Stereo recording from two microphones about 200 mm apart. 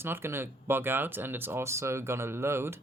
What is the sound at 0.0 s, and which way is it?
Speech, 10° right (ahead or behind).